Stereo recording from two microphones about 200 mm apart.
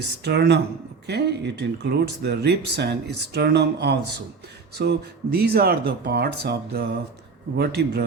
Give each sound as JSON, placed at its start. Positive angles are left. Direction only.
{"t": 0.3, "sound": "speech", "side_deg": -55}